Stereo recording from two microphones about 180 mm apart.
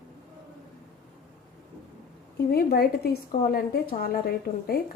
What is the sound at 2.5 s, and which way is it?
Speech, 60° left (ahead or behind).